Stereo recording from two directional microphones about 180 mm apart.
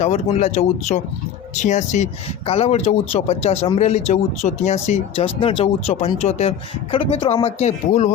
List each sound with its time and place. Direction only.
0.0 s speech: 35° left (ahead or behind)